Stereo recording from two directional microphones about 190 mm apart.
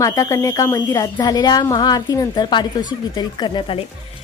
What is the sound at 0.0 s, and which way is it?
A woman's voice, 15° left (ahead or behind).